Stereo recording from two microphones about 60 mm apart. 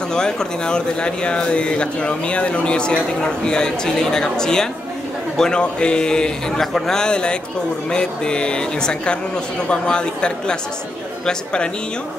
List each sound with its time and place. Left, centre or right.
0.1 s speech: centre